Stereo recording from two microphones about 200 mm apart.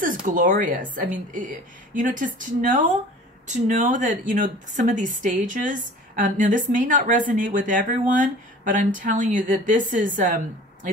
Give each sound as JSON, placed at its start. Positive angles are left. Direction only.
{"t": 0.0, "sound": "speech", "side_deg": -40}